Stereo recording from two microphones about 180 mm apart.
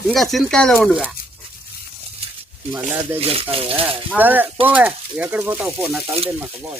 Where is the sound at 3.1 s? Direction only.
35° right (ahead or behind).